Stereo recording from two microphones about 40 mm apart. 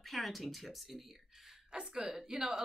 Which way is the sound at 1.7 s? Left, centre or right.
Right.